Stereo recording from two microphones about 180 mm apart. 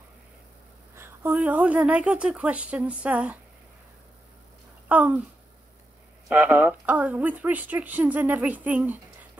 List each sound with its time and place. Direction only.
0.9 s speech: 10° right (ahead or behind)
4.8 s speech: 10° right (ahead or behind)
6.2 s speech: 5° right (ahead or behind)